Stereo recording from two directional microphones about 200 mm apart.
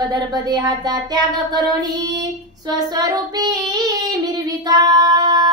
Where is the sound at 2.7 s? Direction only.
20° right (ahead or behind).